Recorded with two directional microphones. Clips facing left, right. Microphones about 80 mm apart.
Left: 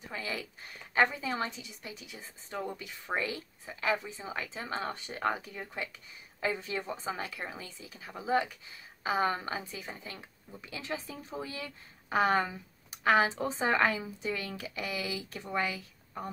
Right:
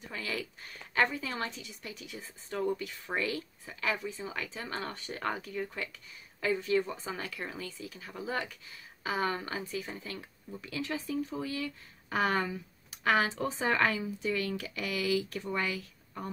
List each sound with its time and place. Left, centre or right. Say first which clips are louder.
0.1 s speech: even; centre